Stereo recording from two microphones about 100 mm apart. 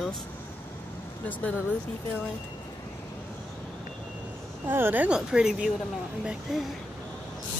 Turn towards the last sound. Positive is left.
turn(degrees=0)  # may be behind; listen again after turning